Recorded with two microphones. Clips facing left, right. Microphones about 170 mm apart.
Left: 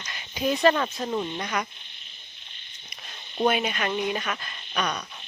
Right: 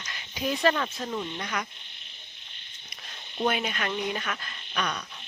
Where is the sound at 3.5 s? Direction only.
15° left (ahead or behind).